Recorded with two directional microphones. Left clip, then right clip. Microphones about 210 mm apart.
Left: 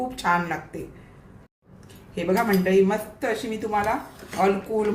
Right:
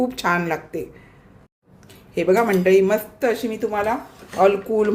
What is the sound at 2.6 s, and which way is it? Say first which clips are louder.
Speech: right 5 dB; 50° right (ahead or behind).